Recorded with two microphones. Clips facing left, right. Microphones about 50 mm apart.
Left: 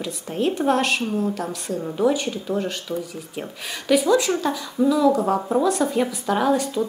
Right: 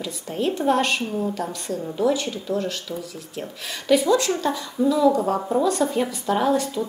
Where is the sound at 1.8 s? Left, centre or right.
Centre.